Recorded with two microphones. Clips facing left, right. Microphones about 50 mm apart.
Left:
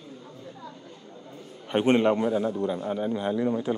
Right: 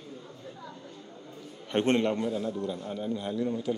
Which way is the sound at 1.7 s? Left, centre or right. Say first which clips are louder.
Left 4 dB; centre.